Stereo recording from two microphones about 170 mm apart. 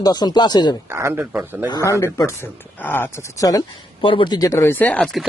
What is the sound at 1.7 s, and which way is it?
Speech, 20° left (ahead or behind).